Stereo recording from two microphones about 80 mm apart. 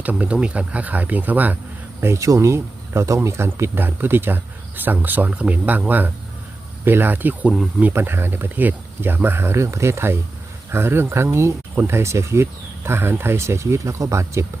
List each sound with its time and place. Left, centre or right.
0.0 s speech: centre
2.0 s speech: right